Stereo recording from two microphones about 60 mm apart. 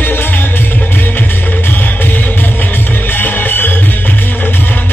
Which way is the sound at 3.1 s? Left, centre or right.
Left.